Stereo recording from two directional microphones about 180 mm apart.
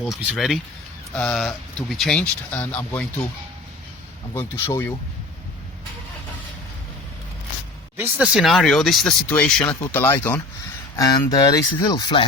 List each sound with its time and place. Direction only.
0.0 s speech: centre (ahead or behind)
4.4 s speech: 15° left (ahead or behind)
7.9 s speech: 10° right (ahead or behind); by 12.2 s 20° left (ahead or behind)